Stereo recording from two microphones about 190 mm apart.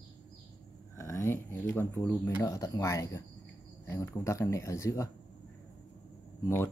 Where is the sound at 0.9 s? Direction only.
15° left (ahead or behind).